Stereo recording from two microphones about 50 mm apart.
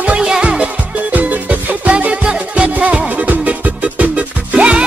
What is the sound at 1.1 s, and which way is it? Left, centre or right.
Music, right.